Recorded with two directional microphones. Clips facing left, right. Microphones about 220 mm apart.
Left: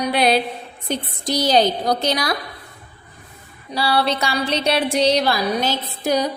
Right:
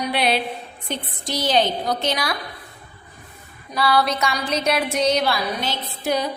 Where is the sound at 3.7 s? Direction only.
30° left (ahead or behind).